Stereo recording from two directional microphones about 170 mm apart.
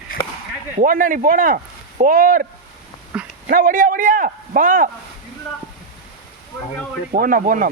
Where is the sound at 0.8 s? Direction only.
55° right (ahead or behind).